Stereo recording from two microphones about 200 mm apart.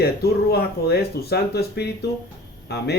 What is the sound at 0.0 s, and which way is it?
Speech, 55° left (ahead or behind).